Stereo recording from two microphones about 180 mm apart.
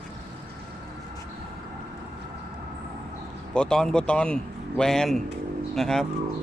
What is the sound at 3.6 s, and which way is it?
Speech, 5° left (ahead or behind).